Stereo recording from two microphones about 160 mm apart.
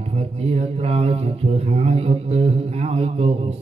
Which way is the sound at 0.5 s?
40° right (ahead or behind).